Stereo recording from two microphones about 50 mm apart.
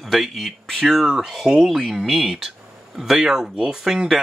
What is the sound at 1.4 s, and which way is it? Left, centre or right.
Speech, centre.